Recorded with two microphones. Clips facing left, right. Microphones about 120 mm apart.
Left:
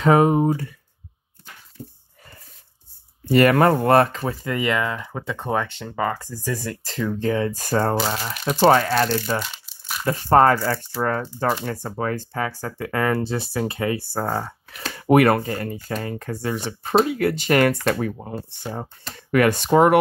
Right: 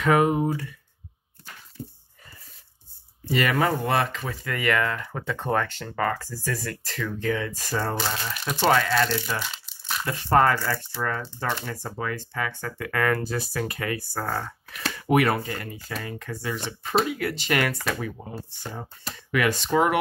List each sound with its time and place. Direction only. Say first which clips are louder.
0.0 s speech: left 4 dB; 30° left (ahead or behind)
3.3 s speech: left 8 dB; 50° left (ahead or behind)
4.5 s speech: left 1 dB; 20° left (ahead or behind)
6.5 s speech: left 4 dB; 25° left (ahead or behind)
7.6 s speech: left 7 dB; 50° left (ahead or behind)
7.9 s speech: left 5 dB; 35° left (ahead or behind)
9.4 s crumpling: left 2 dB; 5° left (ahead or behind)
10.1 s speech: left 5 dB; 40° left (ahead or behind)
15.0 s speech: left 6 dB; 50° left (ahead or behind)
19.3 s speech: left 6 dB; 50° left (ahead or behind)